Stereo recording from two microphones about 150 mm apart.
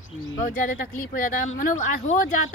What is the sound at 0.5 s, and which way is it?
Speech, 70° left (ahead or behind).